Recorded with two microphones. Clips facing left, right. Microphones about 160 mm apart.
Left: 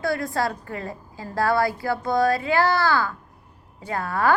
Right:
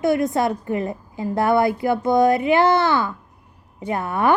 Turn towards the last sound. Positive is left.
turn(degrees=-20)  # may be behind; listen again after turning